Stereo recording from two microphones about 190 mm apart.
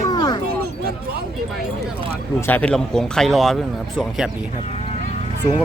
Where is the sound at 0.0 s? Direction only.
20° left (ahead or behind).